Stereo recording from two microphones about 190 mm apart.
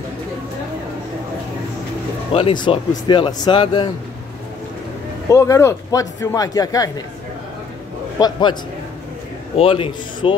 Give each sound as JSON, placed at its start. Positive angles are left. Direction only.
{"t": 2.3, "sound": "speech", "side_deg": 25}
{"t": 5.3, "sound": "speech", "side_deg": 15}
{"t": 8.2, "sound": "speech", "side_deg": 25}
{"t": 9.6, "sound": "speech", "side_deg": 30}